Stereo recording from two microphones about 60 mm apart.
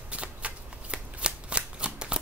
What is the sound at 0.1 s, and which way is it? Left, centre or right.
Shuffling cards, right.